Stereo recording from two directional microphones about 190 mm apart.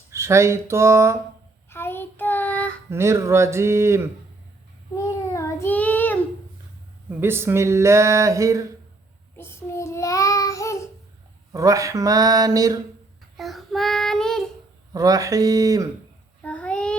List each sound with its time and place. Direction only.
0.1 s speech: 15° right (ahead or behind)
1.7 s child singing: 10° left (ahead or behind)
2.9 s speech: 15° right (ahead or behind)
4.9 s child singing: 15° left (ahead or behind)
7.2 s speech: 10° right (ahead or behind)
9.4 s child singing: 15° left (ahead or behind)
11.5 s speech: 15° right (ahead or behind)
13.3 s child singing: centre (ahead or behind)
14.9 s speech: 20° right (ahead or behind)
16.4 s child singing: 5° left (ahead or behind)